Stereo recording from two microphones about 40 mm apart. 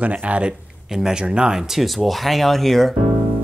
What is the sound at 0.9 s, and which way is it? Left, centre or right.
Speech, centre.